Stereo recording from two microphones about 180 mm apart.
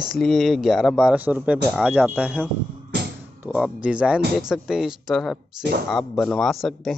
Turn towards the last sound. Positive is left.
turn(degrees=0)  # may be behind; listen again after turning